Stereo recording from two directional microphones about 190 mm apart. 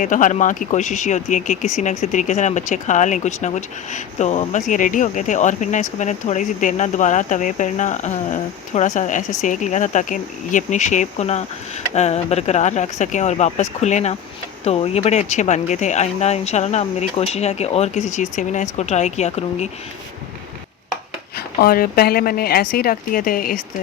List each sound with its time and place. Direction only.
0.0 s speech: 40° left (ahead or behind)
21.3 s speech: 50° left (ahead or behind)